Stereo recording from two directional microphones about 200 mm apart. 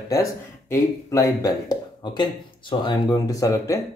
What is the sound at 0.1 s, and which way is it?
Speech, 15° left (ahead or behind).